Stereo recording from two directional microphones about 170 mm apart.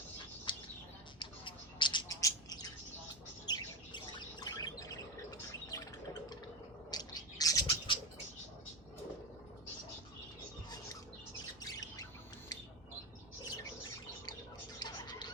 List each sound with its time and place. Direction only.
0.5 s bird: 25° left (ahead or behind)
1.2 s a sound: 30° left (ahead or behind)
3.4 s squawk: 25° left (ahead or behind)
6.9 s bird: 25° left (ahead or behind)
11.6 s bird: 20° left (ahead or behind)
14.8 s a sound: 25° left (ahead or behind)